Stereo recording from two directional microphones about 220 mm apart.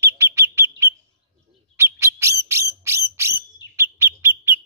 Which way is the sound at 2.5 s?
10° right (ahead or behind).